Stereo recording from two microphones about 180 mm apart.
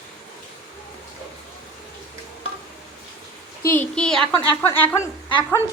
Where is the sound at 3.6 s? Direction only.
10° left (ahead or behind).